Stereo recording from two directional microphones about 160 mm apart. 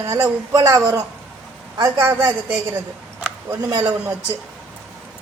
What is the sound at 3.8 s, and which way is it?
Speech, 10° right (ahead or behind).